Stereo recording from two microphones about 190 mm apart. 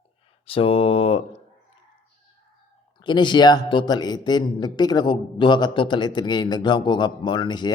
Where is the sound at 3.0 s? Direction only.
25° left (ahead or behind).